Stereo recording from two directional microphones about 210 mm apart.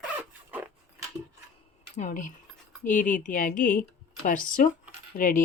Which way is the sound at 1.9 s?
35° left (ahead or behind).